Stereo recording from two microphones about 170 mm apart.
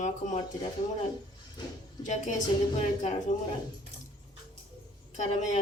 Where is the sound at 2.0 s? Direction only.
45° left (ahead or behind).